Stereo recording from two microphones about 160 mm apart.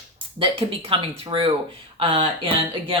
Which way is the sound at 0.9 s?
35° right (ahead or behind).